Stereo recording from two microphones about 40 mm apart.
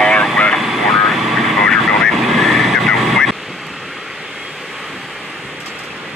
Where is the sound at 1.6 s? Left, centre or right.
Centre.